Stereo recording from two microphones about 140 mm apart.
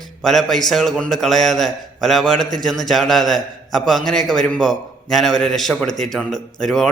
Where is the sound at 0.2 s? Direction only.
Centre (ahead or behind).